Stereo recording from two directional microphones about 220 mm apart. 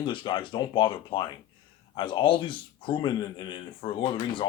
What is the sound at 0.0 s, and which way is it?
Speech, 20° left (ahead or behind).